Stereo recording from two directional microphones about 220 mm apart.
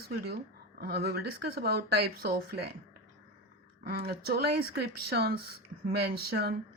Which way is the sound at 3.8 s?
45° right (ahead or behind).